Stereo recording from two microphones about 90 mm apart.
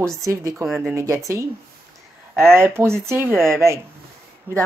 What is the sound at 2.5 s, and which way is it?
Speech, 30° right (ahead or behind).